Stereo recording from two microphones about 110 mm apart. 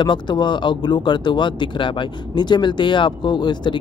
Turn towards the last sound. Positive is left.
turn(degrees=40)  # may be behind; listen again after turning